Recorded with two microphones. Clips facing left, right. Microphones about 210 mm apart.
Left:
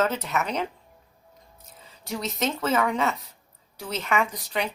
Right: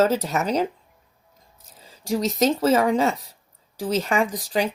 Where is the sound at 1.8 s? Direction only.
35° right (ahead or behind).